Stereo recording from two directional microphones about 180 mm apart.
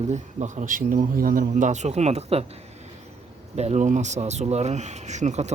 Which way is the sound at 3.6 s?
40° right (ahead or behind).